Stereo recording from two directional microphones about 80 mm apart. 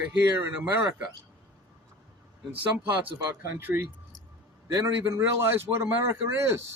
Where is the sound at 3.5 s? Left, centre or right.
Right.